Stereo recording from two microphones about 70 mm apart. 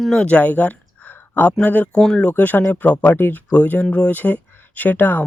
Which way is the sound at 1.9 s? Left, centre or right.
Centre.